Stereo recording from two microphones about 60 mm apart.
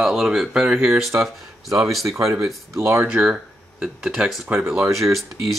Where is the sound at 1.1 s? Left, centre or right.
Right.